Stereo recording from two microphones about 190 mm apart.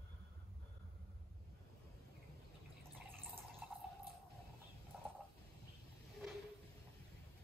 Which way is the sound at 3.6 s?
5° right (ahead or behind).